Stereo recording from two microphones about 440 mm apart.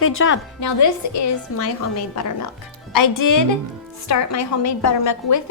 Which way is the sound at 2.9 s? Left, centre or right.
Left.